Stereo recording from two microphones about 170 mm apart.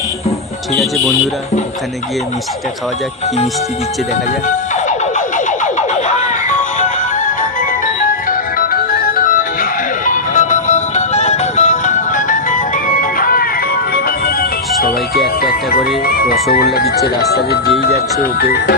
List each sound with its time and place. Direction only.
4.4 s a sound: 45° left (ahead or behind)
6.7 s music: 50° left (ahead or behind)
14.8 s music: 65° left (ahead or behind)
15.4 s speech: 60° left (ahead or behind)